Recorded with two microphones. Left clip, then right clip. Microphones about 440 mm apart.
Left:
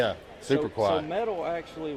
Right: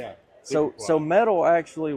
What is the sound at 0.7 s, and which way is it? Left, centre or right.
Speech, right.